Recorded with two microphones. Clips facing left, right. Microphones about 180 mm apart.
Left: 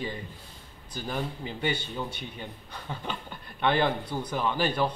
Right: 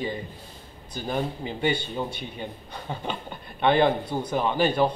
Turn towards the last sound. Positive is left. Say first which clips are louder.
# right 5 dB
turn(degrees=-25)  # may be behind; listen again after turning